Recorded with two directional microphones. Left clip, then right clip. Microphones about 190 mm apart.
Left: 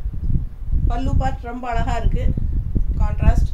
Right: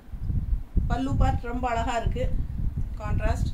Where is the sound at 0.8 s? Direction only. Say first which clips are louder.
Left 3 dB; 15° left (ahead or behind).